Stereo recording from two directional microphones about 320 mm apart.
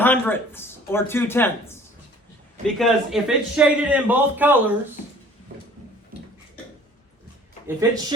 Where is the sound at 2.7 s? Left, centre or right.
Centre.